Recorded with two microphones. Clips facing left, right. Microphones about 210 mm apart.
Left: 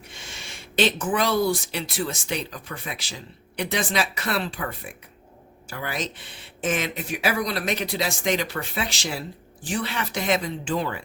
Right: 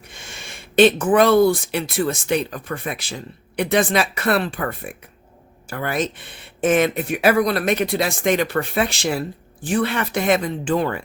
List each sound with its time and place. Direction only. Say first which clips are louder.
0.1 s speech: right 4 dB; 50° right (ahead or behind)